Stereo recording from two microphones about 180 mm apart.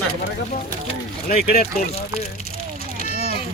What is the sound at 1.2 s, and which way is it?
Speech, 55° left (ahead or behind).